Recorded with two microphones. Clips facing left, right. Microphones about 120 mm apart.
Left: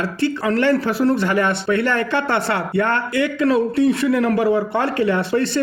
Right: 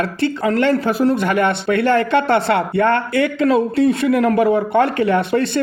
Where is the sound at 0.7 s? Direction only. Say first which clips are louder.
Right 1 dB; 45° right (ahead or behind).